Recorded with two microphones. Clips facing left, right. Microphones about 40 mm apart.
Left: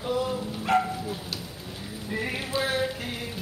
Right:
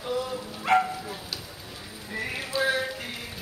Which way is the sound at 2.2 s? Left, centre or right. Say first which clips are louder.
Even; centre.